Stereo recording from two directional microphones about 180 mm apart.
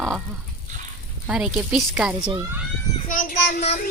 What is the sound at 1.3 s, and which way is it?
Speech, 5° right (ahead or behind).